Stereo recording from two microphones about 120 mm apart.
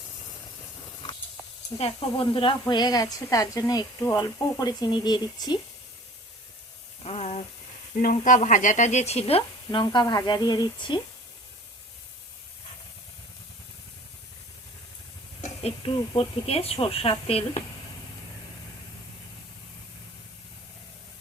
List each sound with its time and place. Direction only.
1.8 s speech: 50° left (ahead or behind)
7.0 s speech: 55° left (ahead or behind)
8.1 s speech: 90° left; by 9.4 s 55° left (ahead or behind)
9.7 s speech: 40° left (ahead or behind)
15.4 s speech: 55° left (ahead or behind)